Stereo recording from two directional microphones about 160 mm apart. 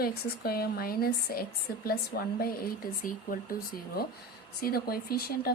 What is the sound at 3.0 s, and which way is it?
Speech, 60° left (ahead or behind).